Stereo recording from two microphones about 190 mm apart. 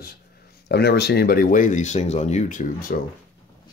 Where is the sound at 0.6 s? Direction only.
60° left (ahead or behind).